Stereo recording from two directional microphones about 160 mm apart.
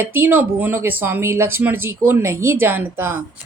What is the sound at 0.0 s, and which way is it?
Speech, 15° right (ahead or behind).